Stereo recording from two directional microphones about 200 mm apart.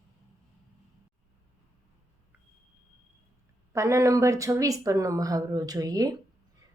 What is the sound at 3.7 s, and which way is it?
A woman's voice, 15° right (ahead or behind).